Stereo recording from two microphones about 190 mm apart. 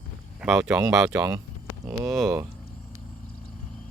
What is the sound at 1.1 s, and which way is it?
Speech, 15° right (ahead or behind).